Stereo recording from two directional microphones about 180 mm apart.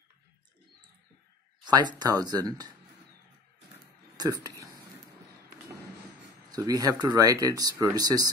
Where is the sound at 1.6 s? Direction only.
25° right (ahead or behind).